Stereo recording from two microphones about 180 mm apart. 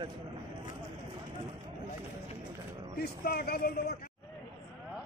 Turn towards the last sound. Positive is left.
turn(degrees=60)  # may be behind; listen again after turning